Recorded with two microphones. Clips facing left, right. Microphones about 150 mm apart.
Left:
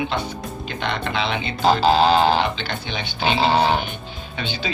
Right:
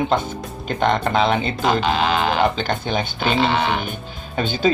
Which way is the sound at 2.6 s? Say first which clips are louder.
Right 6 dB; 45° right (ahead or behind).